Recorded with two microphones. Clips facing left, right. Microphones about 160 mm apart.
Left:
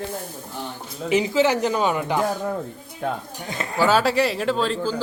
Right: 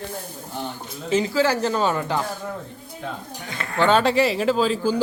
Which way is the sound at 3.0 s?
55° left (ahead or behind).